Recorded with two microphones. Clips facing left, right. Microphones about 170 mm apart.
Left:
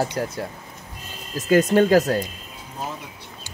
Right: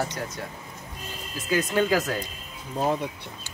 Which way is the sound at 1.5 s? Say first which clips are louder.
Left 8 dB; 45° left (ahead or behind).